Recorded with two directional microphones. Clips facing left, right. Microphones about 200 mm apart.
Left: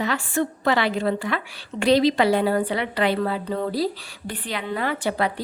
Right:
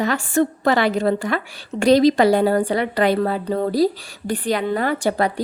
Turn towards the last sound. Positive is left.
turn(degrees=-45)  # may be behind; listen again after turning